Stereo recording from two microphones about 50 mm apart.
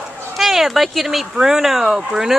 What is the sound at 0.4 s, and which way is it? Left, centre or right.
A woman's voice, centre.